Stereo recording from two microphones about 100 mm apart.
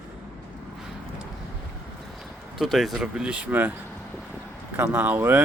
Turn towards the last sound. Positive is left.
turn(degrees=-20)  # may be behind; listen again after turning